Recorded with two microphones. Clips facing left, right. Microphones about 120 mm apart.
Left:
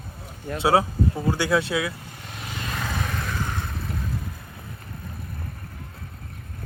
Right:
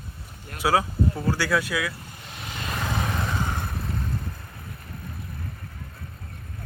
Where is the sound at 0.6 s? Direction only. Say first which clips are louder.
Left 2 dB; 25° left (ahead or behind).